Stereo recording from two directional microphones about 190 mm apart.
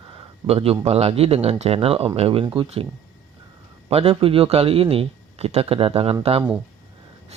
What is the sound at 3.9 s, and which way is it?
A man's voice, 30° right (ahead or behind).